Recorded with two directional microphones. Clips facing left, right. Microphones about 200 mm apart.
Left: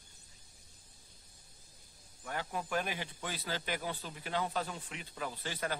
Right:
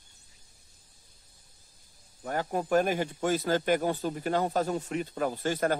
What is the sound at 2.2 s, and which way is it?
Speech, 45° right (ahead or behind).